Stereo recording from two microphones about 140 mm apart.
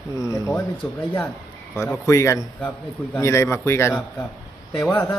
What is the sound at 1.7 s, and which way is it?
A man's voice, 20° left (ahead or behind).